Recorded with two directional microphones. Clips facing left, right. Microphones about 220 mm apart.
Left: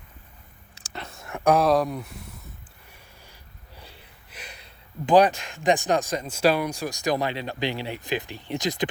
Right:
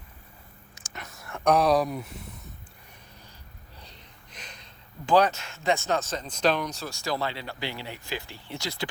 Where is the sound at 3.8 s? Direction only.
5° left (ahead or behind).